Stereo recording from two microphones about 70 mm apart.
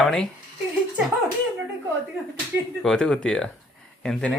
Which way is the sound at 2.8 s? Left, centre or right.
Centre.